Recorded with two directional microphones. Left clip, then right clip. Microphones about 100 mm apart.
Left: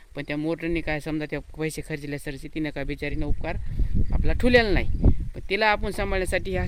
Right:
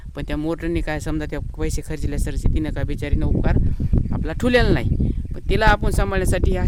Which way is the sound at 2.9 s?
50° right (ahead or behind).